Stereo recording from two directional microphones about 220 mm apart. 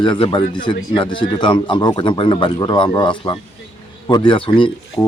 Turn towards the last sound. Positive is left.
turn(degrees=25)  # may be behind; listen again after turning